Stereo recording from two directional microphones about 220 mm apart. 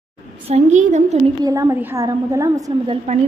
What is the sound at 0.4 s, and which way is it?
Speech, 30° right (ahead or behind).